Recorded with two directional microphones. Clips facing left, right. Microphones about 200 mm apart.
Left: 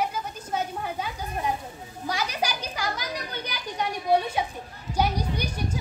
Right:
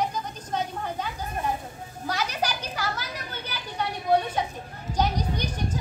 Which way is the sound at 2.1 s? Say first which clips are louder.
Even; 10° left (ahead or behind).